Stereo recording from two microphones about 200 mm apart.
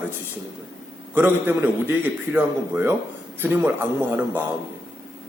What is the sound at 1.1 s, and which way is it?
A man's voice, 10° right (ahead or behind).